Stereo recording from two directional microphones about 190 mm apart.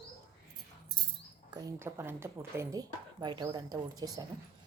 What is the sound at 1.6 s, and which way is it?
Speech, 15° right (ahead or behind).